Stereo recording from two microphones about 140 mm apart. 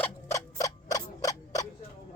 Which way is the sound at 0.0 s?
20° left (ahead or behind).